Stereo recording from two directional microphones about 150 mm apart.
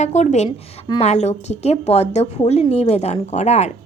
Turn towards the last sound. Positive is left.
turn(degrees=45)  # may be behind; listen again after turning